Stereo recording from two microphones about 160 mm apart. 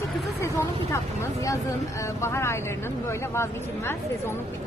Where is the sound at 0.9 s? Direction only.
20° left (ahead or behind).